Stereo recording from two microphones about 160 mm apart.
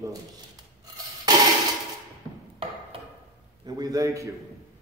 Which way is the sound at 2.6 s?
35° right (ahead or behind).